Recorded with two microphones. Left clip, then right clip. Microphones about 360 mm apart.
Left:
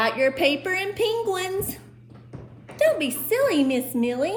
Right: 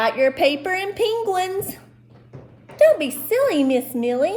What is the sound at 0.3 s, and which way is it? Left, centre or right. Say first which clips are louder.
Speech: right 3 dB; centre.